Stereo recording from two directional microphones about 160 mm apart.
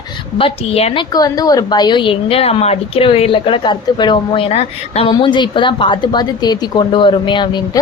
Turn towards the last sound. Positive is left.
turn(degrees=30)  # may be behind; listen again after turning